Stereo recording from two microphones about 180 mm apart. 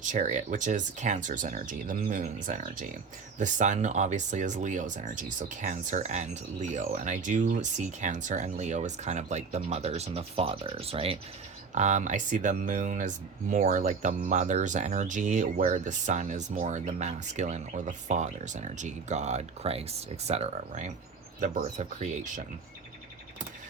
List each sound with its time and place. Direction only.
0.0 s speech: 45° right (ahead or behind)